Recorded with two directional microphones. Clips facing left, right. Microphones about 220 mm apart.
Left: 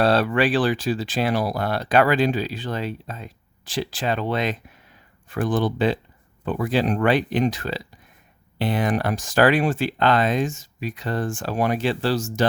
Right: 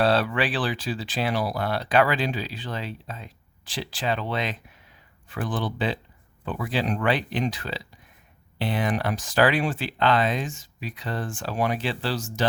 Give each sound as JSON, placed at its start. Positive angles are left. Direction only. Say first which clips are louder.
{"t": 0.0, "sound": "speech", "louder": "left 4 dB", "side_deg": 45}